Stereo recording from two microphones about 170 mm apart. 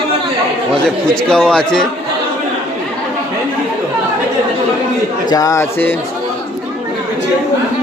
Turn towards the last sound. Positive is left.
turn(degrees=15)  # may be behind; listen again after turning